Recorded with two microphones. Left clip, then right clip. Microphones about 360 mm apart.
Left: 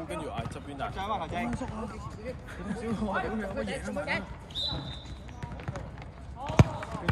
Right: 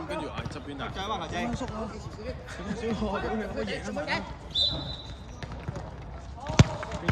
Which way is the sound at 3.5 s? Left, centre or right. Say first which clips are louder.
Right 1 dB; centre.